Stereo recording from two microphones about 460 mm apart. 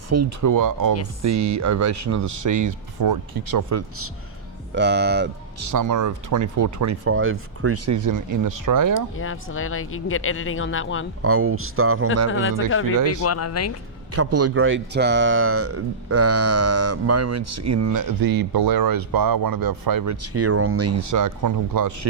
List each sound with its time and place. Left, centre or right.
0.1 s speech: right
3.5 s speech: right
5.5 s speech: right
9.1 s speech: left
11.2 s speech: right
12.3 s speech: left
14.1 s speech: right
20.2 s speech: right
21.1 s speech: right